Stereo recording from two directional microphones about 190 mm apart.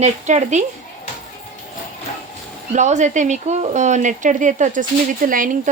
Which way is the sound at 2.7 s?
40° right (ahead or behind).